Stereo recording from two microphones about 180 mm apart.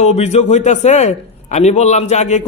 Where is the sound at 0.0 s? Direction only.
40° left (ahead or behind).